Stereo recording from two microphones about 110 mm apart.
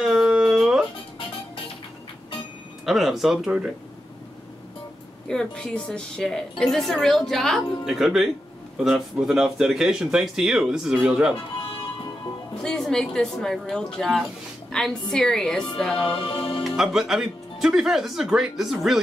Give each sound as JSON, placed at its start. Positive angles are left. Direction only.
{"t": 0.0, "sound": "a sound", "side_deg": -5}
{"t": 2.8, "sound": "speech", "side_deg": 0}
{"t": 5.3, "sound": "a woman's voice", "side_deg": 5}
{"t": 12.6, "sound": "speech", "side_deg": 5}
{"t": 16.3, "sound": "music", "side_deg": 50}
{"t": 16.6, "sound": "speech", "side_deg": -5}